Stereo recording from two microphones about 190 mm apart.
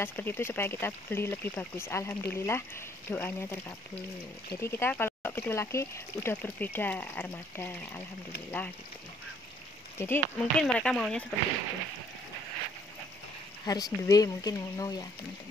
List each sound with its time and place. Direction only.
0.0 s speech: 10° left (ahead or behind)
9.9 s speech: 10° left (ahead or behind)
13.7 s speech: 20° left (ahead or behind)